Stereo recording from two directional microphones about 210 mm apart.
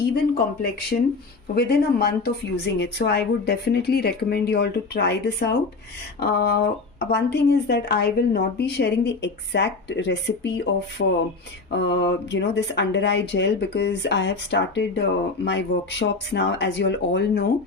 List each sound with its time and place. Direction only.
0.1 s speech: 50° left (ahead or behind)